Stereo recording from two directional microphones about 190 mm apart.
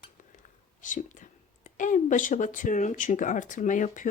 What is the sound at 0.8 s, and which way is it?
Speech, 40° left (ahead or behind).